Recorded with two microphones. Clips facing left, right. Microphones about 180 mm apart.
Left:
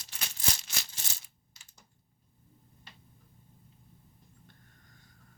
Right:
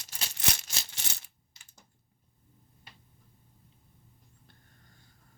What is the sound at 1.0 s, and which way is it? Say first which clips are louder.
Coin: right 2 dB; 75° right (ahead or behind).